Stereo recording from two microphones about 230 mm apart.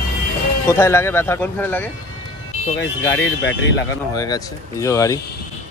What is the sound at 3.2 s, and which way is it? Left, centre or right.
Speech, left.